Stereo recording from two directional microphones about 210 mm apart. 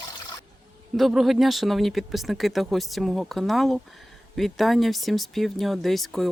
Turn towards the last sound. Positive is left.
turn(degrees=0)  # may be behind; listen again after turning